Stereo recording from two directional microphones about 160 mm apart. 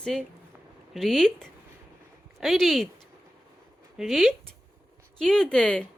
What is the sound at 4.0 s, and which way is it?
Speech, centre (ahead or behind).